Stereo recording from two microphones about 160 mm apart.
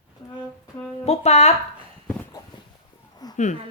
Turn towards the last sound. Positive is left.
turn(degrees=25)  # may be behind; listen again after turning